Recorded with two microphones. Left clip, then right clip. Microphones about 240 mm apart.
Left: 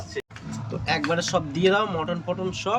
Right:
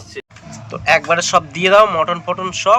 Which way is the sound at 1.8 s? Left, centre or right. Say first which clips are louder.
Right 13 dB; right.